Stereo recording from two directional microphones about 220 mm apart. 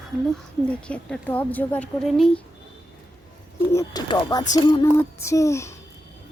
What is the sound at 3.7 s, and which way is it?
Speech, 15° left (ahead or behind).